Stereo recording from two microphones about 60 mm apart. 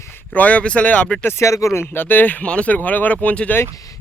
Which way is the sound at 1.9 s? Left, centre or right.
Left.